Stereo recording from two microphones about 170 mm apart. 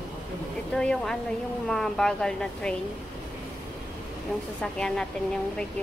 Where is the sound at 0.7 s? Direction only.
5° left (ahead or behind).